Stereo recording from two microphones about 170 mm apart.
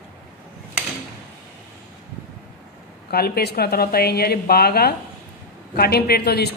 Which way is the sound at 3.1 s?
65° left (ahead or behind).